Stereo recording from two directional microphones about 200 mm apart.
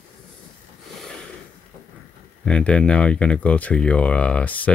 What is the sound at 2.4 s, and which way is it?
Speech, 5° left (ahead or behind).